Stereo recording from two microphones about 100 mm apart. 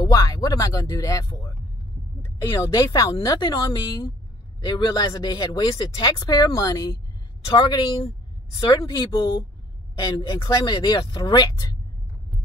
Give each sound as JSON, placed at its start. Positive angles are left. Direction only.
{"t": 0.0, "sound": "a sound", "side_deg": 40}
{"t": 2.5, "sound": "speech", "side_deg": 35}
{"t": 7.5, "sound": "speech", "side_deg": 50}